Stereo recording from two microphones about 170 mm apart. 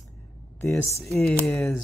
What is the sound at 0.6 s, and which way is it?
Speech, 15° left (ahead or behind).